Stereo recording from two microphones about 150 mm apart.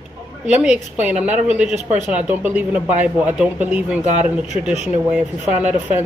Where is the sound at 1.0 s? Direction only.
10° right (ahead or behind).